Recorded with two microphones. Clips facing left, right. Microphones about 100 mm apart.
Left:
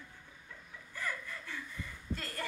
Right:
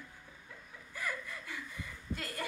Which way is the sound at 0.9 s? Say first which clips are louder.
Even; 15° right (ahead or behind).